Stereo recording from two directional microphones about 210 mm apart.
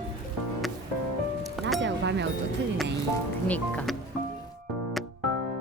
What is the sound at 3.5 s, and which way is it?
Speech, 5° left (ahead or behind).